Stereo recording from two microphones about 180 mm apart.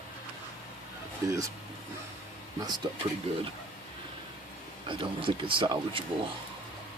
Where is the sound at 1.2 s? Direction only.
20° right (ahead or behind).